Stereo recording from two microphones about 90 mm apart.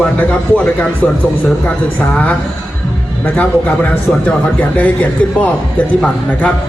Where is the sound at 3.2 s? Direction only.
20° left (ahead or behind).